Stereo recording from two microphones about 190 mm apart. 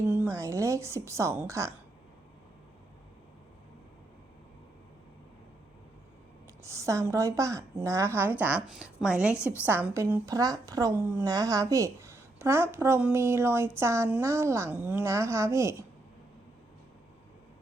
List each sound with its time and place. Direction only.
0.1 s a woman's voice: 10° right (ahead or behind)
6.6 s a woman's voice: 15° right (ahead or behind)